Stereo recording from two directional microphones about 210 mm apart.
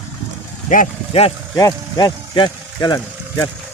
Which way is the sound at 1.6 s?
20° left (ahead or behind).